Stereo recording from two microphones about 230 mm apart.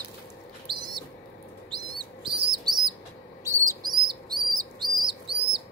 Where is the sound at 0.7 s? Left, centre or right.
Right.